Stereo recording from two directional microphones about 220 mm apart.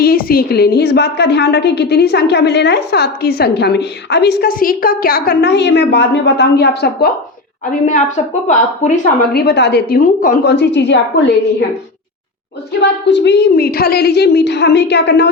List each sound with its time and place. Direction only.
0.0 s a woman's voice: 45° left (ahead or behind)
7.6 s speech: 35° left (ahead or behind)
9.3 s a woman's voice: 50° left (ahead or behind)
12.8 s a woman's voice: 50° left (ahead or behind)